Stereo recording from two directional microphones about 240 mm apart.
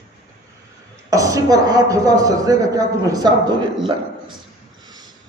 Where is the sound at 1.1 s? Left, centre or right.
Centre.